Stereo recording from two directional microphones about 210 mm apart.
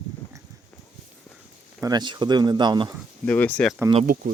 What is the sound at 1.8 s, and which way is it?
Speech, 20° right (ahead or behind).